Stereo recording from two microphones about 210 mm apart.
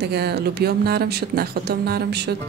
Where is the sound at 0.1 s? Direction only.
50° right (ahead or behind).